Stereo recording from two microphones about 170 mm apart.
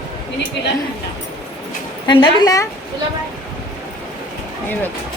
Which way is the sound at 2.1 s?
25° left (ahead or behind).